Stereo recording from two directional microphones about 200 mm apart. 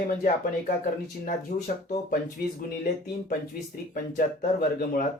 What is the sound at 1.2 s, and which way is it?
Speech, 45° left (ahead or behind).